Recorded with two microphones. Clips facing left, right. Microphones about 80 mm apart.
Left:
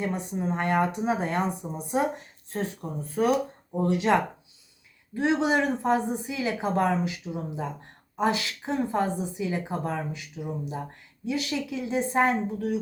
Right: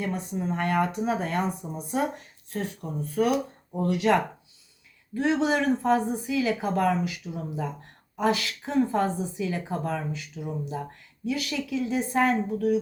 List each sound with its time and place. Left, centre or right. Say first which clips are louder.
0.0 s speech: left 1 dB; left